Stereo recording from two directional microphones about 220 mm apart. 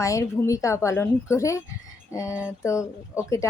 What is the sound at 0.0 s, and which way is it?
A woman's voice, 15° left (ahead or behind).